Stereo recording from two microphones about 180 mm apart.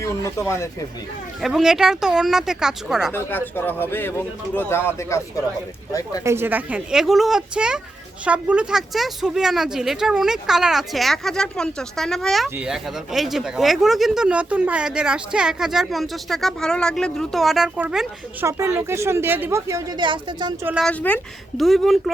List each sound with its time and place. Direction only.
0.0 s speech: 15° left (ahead or behind)
1.4 s speech: centre (ahead or behind)
3.1 s speech: 10° left (ahead or behind)
6.2 s speech: 15° right (ahead or behind)
18.4 s a woman's voice: 15° right (ahead or behind)
20.8 s speech: 10° left (ahead or behind)